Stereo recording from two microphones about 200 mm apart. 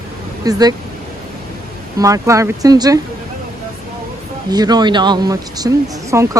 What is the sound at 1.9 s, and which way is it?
Speech, 15° right (ahead or behind).